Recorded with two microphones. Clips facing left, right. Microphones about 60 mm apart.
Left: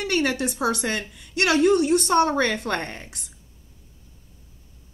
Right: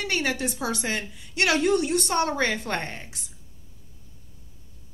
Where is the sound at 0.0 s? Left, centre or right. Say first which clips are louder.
Left 3 dB; left.